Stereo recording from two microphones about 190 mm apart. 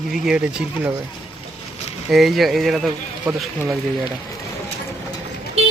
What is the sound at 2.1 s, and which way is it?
Speech, centre (ahead or behind).